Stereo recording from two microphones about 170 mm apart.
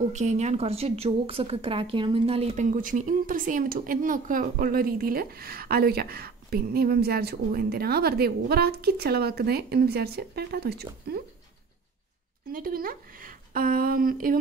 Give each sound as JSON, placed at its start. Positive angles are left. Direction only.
{"t": 0.1, "sound": "speech", "side_deg": -45}
{"t": 12.5, "sound": "speech", "side_deg": -55}